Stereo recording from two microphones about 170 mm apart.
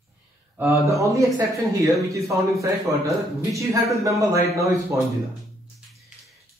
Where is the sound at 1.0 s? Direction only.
15° right (ahead or behind).